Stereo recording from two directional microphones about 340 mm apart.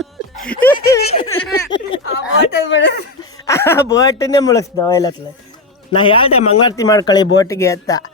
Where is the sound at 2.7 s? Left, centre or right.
Left.